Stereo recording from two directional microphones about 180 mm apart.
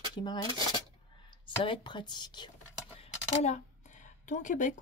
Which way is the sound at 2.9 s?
35° left (ahead or behind).